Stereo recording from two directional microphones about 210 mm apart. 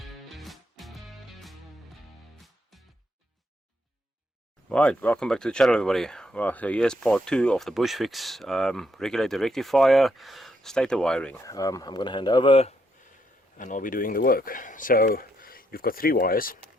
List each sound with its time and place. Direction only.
0.0 s music: centre (ahead or behind)
4.7 s speech: 5° left (ahead or behind)
11.5 s speech: 15° left (ahead or behind)
13.6 s speech: 40° left (ahead or behind)